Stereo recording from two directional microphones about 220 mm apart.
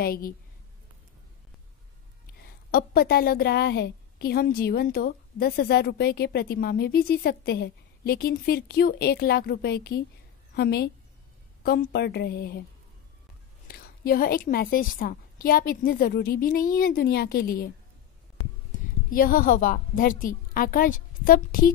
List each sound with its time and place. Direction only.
0.0 s a woman's voice: 45° left (ahead or behind)
2.7 s a woman's voice: 40° left (ahead or behind)
13.7 s a woman's voice: 45° left (ahead or behind)
19.0 s a woman's voice: 40° left (ahead or behind)